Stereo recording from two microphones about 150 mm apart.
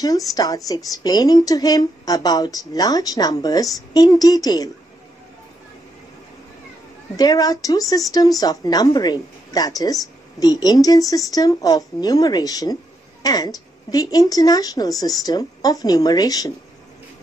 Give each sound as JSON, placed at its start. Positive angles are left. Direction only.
{"t": 0.0, "sound": "a woman's voice", "side_deg": 25}
{"t": 7.2, "sound": "a woman's voice", "side_deg": 25}